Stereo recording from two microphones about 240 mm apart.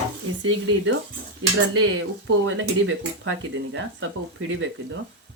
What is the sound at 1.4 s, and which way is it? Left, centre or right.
Speech, right.